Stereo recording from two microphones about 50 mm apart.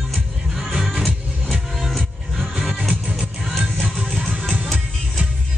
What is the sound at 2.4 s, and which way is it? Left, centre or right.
Music, centre.